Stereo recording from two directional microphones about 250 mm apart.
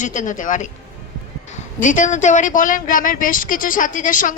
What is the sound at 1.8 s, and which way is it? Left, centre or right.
A man's voice, left.